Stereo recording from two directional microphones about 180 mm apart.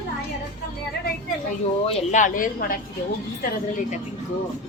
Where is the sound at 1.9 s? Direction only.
40° left (ahead or behind).